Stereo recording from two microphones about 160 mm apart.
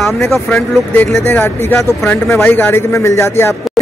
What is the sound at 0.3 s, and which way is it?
A man's voice, 5° left (ahead or behind).